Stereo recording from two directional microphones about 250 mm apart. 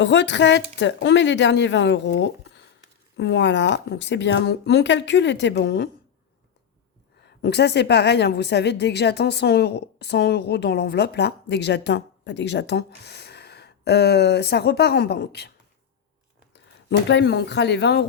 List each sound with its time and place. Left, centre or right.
0.0 s speech: left
7.3 s a woman's voice: left
17.1 s speech: left